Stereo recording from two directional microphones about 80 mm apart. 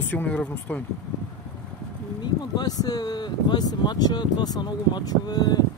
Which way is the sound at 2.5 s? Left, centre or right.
Left.